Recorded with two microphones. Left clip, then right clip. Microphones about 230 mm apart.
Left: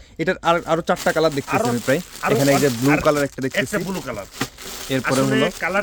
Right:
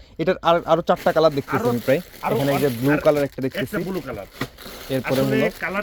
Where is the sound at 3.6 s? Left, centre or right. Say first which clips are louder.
Left 6 dB; left.